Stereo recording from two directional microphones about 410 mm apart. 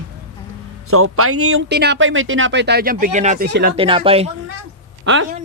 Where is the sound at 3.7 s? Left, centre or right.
Centre.